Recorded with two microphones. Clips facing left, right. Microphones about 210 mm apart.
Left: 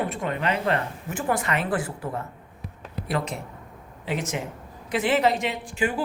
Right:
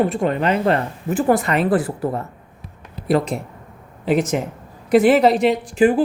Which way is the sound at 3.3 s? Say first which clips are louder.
Right 8 dB; 90° right.